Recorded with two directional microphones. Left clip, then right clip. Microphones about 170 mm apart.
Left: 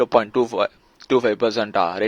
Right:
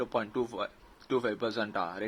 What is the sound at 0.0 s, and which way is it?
Speech, 45° left (ahead or behind).